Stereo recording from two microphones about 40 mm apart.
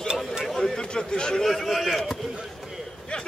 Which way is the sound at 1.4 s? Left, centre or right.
Centre.